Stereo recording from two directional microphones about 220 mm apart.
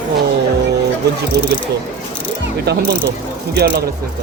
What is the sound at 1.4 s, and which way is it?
Speech, 50° right (ahead or behind).